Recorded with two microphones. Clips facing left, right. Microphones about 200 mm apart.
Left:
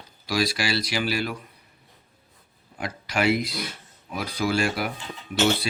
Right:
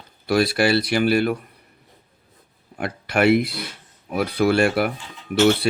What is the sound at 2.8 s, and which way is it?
Speech, 60° right (ahead or behind).